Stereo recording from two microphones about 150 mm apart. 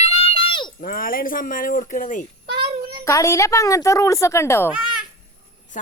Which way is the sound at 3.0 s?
20° left (ahead or behind).